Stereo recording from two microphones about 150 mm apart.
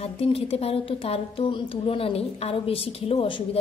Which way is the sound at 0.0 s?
40° left (ahead or behind).